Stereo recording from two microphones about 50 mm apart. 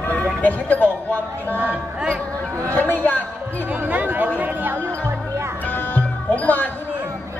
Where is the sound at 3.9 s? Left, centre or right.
Right.